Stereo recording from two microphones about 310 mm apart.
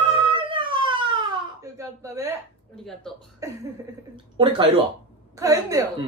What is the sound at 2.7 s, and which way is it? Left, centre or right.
Speech, centre.